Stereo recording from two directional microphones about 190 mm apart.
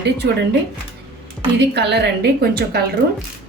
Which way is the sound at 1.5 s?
60° right (ahead or behind).